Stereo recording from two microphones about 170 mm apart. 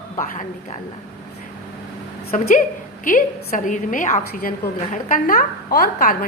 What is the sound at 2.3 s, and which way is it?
A woman's voice, 50° left (ahead or behind).